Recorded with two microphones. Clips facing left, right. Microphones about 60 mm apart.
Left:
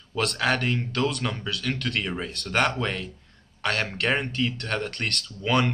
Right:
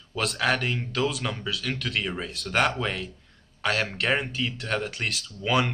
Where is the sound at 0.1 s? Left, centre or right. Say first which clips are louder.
Left 1 dB; centre.